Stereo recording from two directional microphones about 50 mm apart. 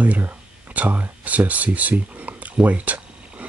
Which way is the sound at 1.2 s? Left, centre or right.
Right.